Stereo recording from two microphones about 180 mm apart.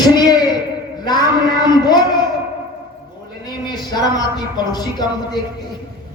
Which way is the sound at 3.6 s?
20° left (ahead or behind).